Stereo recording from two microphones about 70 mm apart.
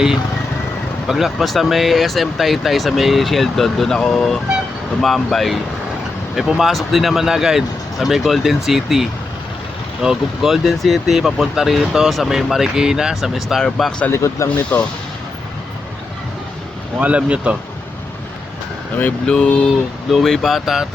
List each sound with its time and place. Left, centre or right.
1.0 s speech: centre
13.6 s speech: centre
14.1 s speech: left
14.5 s speech: left
17.0 s speech: centre
19.2 s speech: centre
20.1 s speech: centre